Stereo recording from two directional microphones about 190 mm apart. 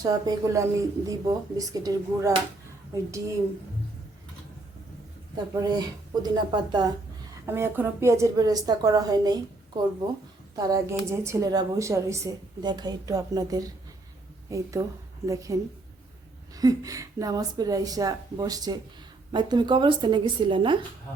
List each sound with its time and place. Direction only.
0.0 s a woman's voice: 20° right (ahead or behind)
5.5 s a woman's voice: 20° right (ahead or behind)
7.4 s a woman's voice: 15° right (ahead or behind)
16.6 s a woman's voice: 20° right (ahead or behind)